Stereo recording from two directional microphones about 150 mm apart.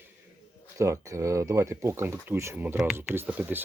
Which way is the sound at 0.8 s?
20° right (ahead or behind).